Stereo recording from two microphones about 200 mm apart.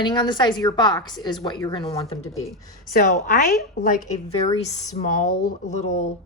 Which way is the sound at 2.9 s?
50° left (ahead or behind).